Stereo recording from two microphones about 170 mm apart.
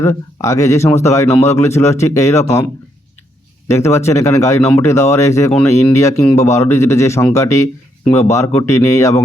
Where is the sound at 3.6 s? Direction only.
15° left (ahead or behind).